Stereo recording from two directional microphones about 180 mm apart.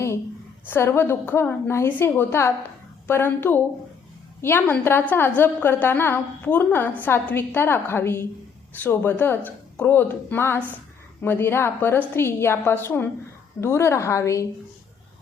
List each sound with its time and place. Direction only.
0.6 s a woman's voice: 10° left (ahead or behind)